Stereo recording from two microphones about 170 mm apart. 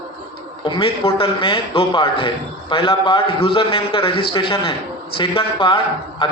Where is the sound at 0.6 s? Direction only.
30° left (ahead or behind).